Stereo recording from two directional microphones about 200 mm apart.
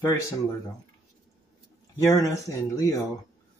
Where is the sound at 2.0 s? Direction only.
15° left (ahead or behind).